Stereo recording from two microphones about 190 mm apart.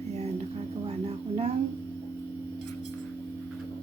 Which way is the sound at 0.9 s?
35° right (ahead or behind).